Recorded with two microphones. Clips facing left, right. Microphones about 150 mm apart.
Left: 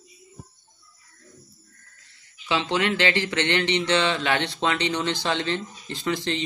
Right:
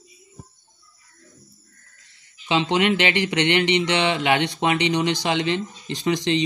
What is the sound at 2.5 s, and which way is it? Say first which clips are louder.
Speech: right 4 dB; 20° right (ahead or behind).